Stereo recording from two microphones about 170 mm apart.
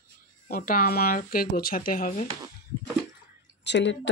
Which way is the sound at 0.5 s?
55° left (ahead or behind).